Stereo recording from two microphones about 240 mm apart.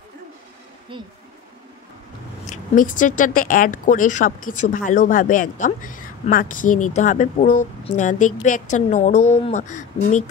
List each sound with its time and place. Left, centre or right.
0.9 s speech: right
2.5 s speech: left